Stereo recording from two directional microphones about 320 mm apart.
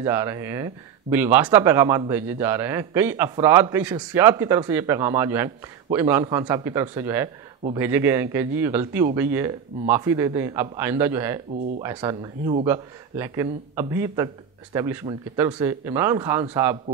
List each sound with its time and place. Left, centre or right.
0.0 s speech: centre